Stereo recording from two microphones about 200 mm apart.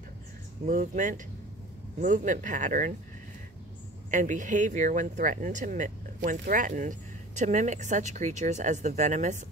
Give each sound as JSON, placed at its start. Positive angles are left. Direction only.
{"t": 0.7, "sound": "speech", "side_deg": -40}
{"t": 4.1, "sound": "speech", "side_deg": -40}